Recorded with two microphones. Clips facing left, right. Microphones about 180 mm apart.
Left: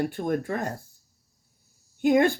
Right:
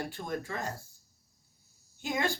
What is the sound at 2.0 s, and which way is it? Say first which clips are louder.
Speech: left 12 dB; 55° left (ahead or behind).